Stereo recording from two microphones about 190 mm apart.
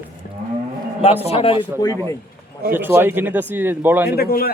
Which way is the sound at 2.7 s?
10° right (ahead or behind).